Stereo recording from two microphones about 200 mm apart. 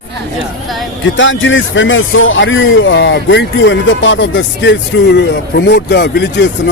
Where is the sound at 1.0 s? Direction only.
70° left (ahead or behind).